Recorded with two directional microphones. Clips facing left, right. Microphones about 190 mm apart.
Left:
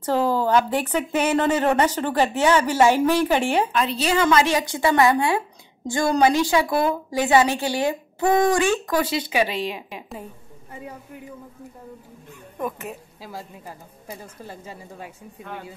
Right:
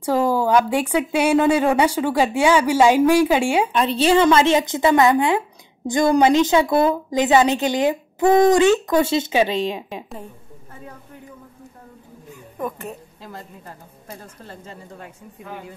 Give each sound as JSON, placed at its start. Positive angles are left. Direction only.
{"t": 0.0, "sound": "speech", "side_deg": -10}
{"t": 3.7, "sound": "a woman's voice", "side_deg": -30}
{"t": 10.7, "sound": "speech", "side_deg": 10}
{"t": 12.5, "sound": "a woman's voice", "side_deg": 0}
{"t": 15.4, "sound": "a woman's voice", "side_deg": 0}